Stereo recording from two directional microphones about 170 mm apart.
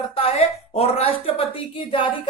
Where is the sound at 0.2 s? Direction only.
40° left (ahead or behind).